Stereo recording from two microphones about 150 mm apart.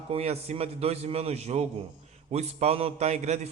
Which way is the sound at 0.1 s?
45° right (ahead or behind).